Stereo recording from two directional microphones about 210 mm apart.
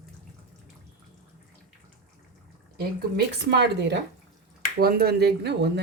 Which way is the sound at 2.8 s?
50° right (ahead or behind).